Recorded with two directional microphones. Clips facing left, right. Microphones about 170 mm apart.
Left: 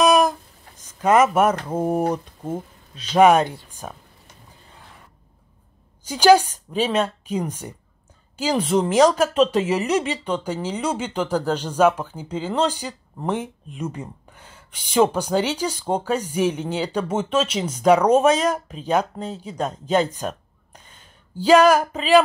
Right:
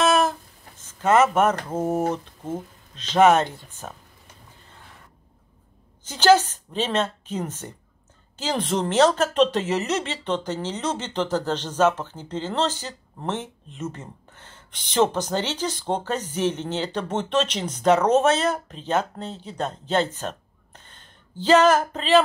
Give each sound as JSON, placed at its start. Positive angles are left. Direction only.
{"t": 0.0, "sound": "a sound", "side_deg": 15}
{"t": 1.0, "sound": "a woman's voice", "side_deg": 10}
{"t": 6.0, "sound": "a woman's voice", "side_deg": 10}